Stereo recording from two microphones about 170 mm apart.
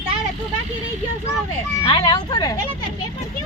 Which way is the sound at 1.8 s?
25° left (ahead or behind).